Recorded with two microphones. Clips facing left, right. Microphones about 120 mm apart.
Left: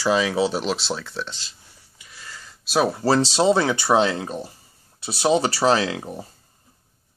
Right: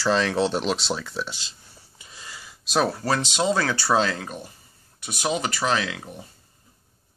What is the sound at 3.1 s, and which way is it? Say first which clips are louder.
Speech: left 7 dB; 35° left (ahead or behind).